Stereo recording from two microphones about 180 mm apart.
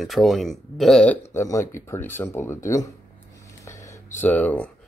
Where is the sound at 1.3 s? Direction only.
15° left (ahead or behind).